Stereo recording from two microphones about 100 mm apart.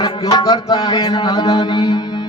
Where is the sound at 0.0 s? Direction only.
45° left (ahead or behind).